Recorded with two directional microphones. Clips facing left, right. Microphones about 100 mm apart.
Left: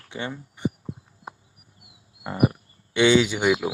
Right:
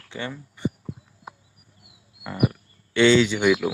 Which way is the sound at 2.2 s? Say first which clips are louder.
Left 2 dB; 30° left (ahead or behind).